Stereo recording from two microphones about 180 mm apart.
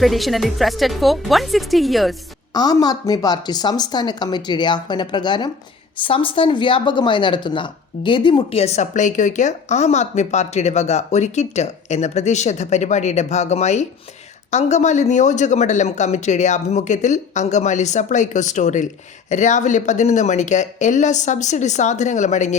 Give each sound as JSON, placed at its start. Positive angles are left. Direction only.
{"t": 0.0, "sound": "speech", "side_deg": 0}
{"t": 2.5, "sound": "a woman's voice", "side_deg": 20}